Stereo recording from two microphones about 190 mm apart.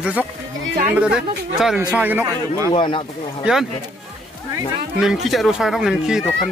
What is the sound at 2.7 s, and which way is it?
Speech, 25° left (ahead or behind).